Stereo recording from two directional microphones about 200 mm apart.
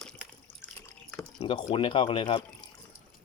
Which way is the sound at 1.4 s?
25° left (ahead or behind).